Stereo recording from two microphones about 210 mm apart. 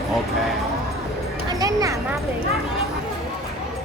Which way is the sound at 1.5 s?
15° right (ahead or behind).